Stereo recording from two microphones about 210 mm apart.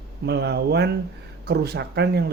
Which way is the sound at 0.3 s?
50° right (ahead or behind).